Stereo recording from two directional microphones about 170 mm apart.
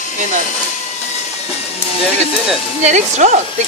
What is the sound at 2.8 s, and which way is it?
Speech, 45° right (ahead or behind).